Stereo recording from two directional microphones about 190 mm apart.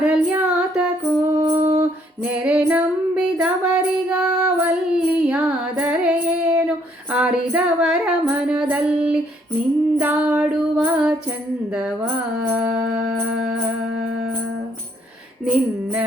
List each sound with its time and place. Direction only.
0.0 s female singing: 5° right (ahead or behind)
1.8 s music: 5° right (ahead or behind)
15.4 s a sound: 10° right (ahead or behind)